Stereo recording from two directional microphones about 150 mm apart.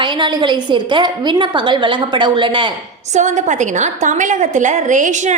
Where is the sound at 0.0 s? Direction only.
30° right (ahead or behind).